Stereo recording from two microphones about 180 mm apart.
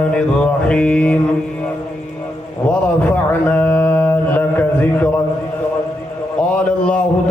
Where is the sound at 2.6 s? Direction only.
10° left (ahead or behind).